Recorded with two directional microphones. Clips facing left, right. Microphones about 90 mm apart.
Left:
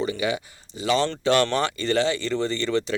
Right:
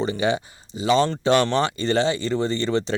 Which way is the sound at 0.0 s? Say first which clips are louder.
Right 3 dB; 30° right (ahead or behind).